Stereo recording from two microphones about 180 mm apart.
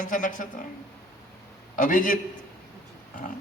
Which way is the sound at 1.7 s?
45° left (ahead or behind).